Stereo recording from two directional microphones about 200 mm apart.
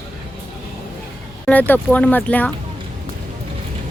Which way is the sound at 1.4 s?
10° left (ahead or behind).